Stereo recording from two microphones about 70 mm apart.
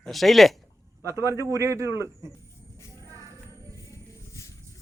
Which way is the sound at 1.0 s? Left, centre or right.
Right.